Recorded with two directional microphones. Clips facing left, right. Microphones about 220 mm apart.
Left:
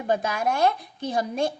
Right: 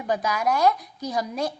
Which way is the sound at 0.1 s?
25° left (ahead or behind).